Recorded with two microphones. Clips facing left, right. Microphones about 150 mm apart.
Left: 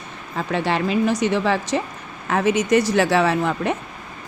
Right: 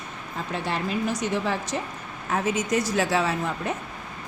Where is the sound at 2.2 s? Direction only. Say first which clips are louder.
Left 7 dB; 75° left (ahead or behind).